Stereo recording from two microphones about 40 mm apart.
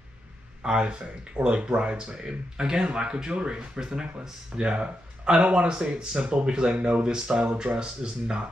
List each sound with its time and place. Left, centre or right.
0.7 s speech: right
2.0 s speech: centre